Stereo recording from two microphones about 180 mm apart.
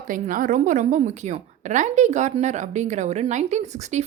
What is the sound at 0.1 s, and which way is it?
A woman's voice, 50° right (ahead or behind).